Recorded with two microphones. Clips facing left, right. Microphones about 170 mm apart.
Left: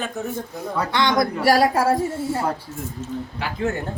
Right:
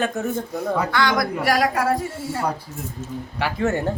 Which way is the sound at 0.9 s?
25° left (ahead or behind).